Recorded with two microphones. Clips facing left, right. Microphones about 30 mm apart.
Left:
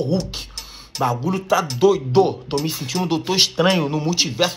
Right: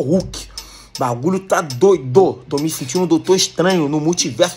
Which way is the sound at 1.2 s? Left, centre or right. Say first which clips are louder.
Right 5 dB; left.